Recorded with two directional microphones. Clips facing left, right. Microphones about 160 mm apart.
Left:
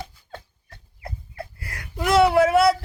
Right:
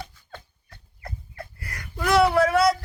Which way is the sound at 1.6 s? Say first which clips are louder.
Left 1 dB; 25° left (ahead or behind).